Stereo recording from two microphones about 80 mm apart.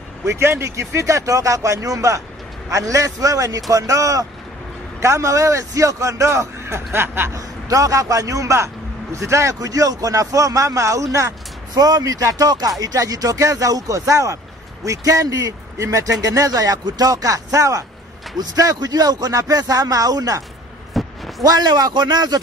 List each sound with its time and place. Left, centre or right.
0.2 s a man's voice: right
7.3 s speech: right
20.9 s a sound: centre
21.4 s a man's voice: right